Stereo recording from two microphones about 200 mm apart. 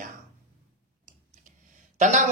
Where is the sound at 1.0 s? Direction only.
40° right (ahead or behind).